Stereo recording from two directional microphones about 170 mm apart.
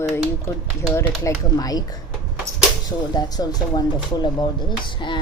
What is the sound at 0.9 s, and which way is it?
Speech, 20° left (ahead or behind).